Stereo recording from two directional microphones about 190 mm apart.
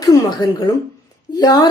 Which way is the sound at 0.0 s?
20° left (ahead or behind).